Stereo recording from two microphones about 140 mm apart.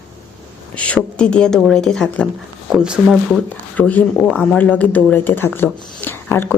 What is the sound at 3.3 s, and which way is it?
Speech, 10° left (ahead or behind).